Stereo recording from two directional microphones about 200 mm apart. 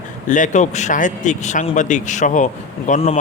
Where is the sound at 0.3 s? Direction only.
40° left (ahead or behind).